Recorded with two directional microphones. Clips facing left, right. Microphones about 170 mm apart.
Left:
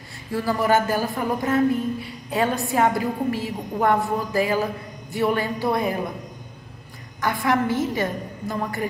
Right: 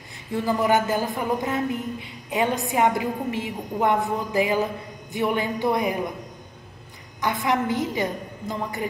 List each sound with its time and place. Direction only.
0.3 s a woman's voice: 20° right (ahead or behind)
7.4 s a woman's voice: 20° right (ahead or behind)